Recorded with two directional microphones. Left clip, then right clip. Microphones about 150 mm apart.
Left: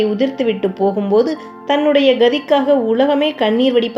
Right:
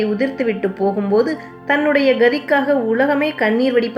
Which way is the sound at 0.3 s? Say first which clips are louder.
Left 2 dB; 20° left (ahead or behind).